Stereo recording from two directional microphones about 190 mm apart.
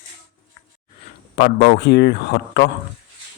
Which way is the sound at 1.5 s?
65° left (ahead or behind).